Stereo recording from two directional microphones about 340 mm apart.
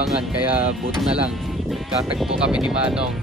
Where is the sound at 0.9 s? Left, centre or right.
Centre.